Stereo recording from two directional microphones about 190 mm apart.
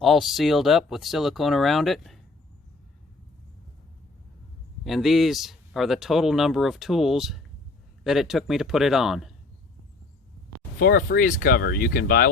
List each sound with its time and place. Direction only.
0.0 s speech: centre (ahead or behind)
4.8 s speech: centre (ahead or behind)
10.8 s speech: 50° left (ahead or behind)